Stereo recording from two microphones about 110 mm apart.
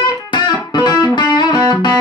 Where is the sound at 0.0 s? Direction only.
40° left (ahead or behind).